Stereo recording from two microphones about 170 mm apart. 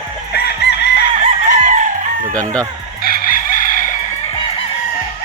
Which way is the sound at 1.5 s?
50° right (ahead or behind).